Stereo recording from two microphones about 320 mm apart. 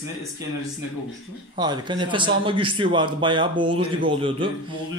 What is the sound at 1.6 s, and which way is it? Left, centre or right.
A man's voice, centre.